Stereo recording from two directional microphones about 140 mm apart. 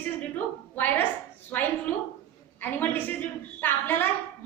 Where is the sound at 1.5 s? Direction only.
10° left (ahead or behind).